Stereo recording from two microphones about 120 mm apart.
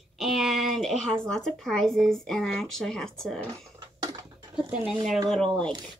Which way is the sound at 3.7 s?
35° right (ahead or behind).